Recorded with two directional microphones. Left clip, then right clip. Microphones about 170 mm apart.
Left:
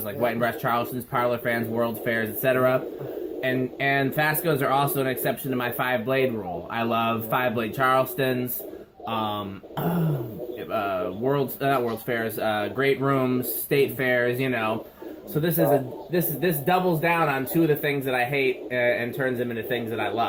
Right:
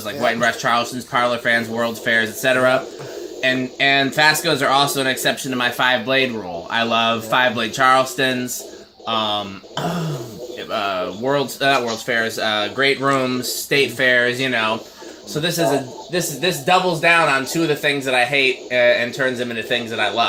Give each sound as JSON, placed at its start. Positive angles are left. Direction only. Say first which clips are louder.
{"t": 0.2, "sound": "speech", "louder": "right 7 dB", "side_deg": 20}
{"t": 16.1, "sound": "a man's voice", "louder": "right 5 dB", "side_deg": 15}